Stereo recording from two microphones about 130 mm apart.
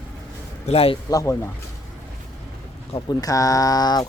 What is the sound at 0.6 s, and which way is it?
Speech, 50° left (ahead or behind).